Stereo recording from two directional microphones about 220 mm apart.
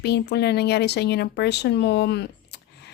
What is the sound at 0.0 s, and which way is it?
Speech, 50° left (ahead or behind).